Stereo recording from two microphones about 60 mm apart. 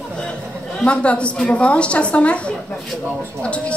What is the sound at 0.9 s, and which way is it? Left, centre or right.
A woman's voice, left.